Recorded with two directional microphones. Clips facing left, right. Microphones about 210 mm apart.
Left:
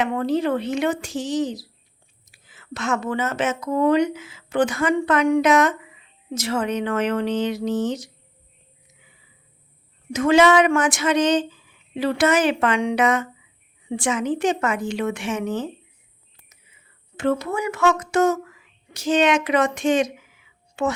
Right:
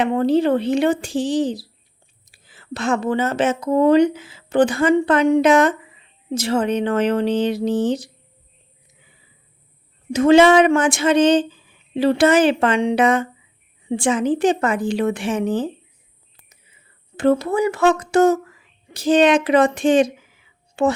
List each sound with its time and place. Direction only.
0.0 s speech: 30° right (ahead or behind)
10.1 s speech: 30° right (ahead or behind)
17.2 s speech: 35° right (ahead or behind)